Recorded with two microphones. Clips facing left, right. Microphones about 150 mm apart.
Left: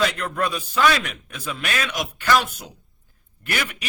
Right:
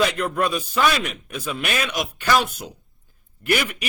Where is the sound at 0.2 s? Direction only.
15° right (ahead or behind).